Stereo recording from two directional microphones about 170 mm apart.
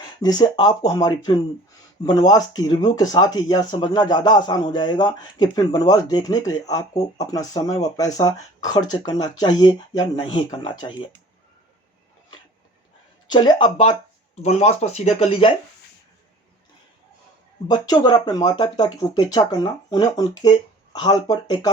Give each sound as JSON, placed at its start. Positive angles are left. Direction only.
{"t": 0.2, "sound": "speech", "side_deg": 25}
{"t": 13.2, "sound": "speech", "side_deg": 25}
{"t": 14.4, "sound": "speech", "side_deg": 40}
{"t": 17.7, "sound": "speech", "side_deg": 25}